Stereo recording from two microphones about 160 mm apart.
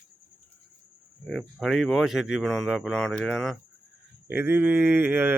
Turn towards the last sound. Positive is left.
turn(degrees=-15)  # may be behind; listen again after turning